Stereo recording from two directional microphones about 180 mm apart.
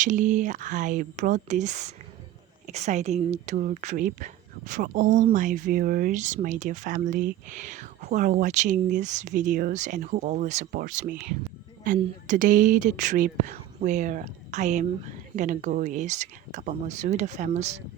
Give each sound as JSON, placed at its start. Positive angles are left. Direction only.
{"t": 0.0, "sound": "speech", "side_deg": -45}